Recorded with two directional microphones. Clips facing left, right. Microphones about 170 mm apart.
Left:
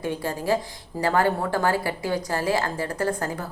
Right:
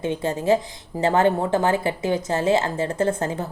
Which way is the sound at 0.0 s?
25° right (ahead or behind).